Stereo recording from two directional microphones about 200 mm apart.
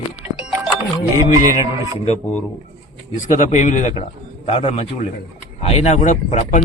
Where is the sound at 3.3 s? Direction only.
35° left (ahead or behind).